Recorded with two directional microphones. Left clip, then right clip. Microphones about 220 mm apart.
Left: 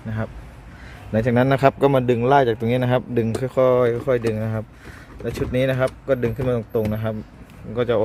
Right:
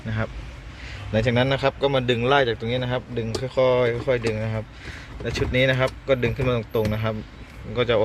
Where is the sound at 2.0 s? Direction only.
25° left (ahead or behind).